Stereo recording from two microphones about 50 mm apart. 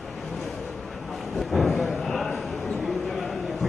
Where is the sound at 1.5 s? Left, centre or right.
Centre.